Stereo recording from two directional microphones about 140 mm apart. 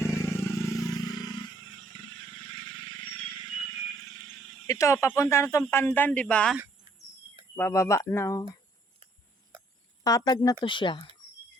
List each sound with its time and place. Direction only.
0.0 s vehicle: 20° left (ahead or behind)
4.0 s a sound: 20° left (ahead or behind)
5.7 s speech: 15° left (ahead or behind)
7.5 s speech: 20° left (ahead or behind)
10.0 s speech: 25° left (ahead or behind)